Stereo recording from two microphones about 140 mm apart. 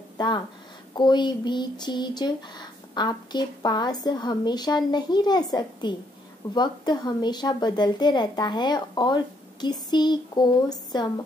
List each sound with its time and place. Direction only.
0.2 s speech: 30° left (ahead or behind)